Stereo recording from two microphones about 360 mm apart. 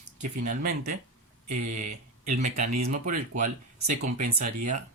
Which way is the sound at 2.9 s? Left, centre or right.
Right.